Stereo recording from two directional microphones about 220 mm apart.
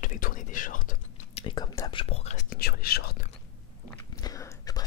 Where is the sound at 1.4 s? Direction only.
20° left (ahead or behind).